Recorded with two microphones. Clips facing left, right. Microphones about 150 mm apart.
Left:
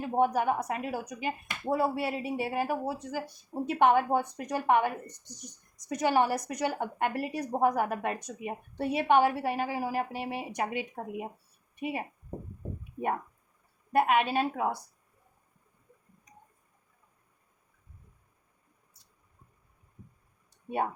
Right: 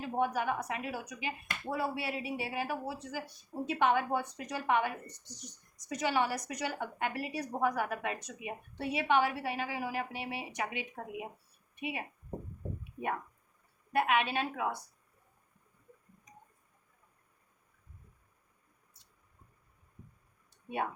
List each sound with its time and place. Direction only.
0.0 s speech: 45° left (ahead or behind)
5.9 s a woman's voice: 45° left (ahead or behind)
13.9 s a woman's voice: 40° left (ahead or behind)
20.7 s speech: 40° left (ahead or behind)